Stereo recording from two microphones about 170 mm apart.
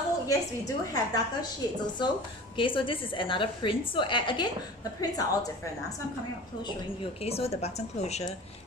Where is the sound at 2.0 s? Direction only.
25° left (ahead or behind).